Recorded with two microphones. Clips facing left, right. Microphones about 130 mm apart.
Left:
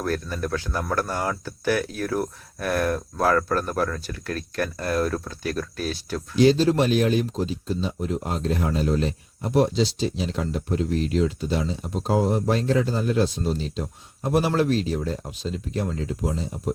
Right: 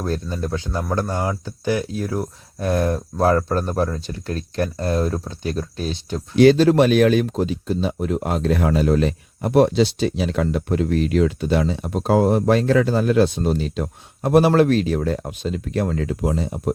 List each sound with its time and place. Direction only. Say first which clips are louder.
0.0 s speech: right 2 dB; 25° right (ahead or behind)
6.3 s speech: right 5 dB; 65° right (ahead or behind)